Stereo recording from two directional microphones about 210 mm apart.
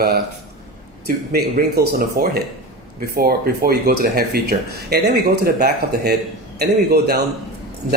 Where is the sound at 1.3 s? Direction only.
45° right (ahead or behind).